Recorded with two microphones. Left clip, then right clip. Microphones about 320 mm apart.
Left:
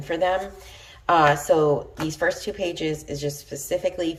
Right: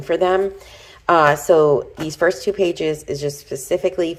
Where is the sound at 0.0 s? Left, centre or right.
Centre.